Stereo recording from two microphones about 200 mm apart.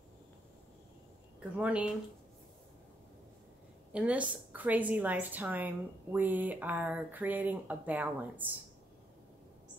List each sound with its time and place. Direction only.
1.4 s speech: 5° right (ahead or behind)
3.9 s speech: 5° right (ahead or behind)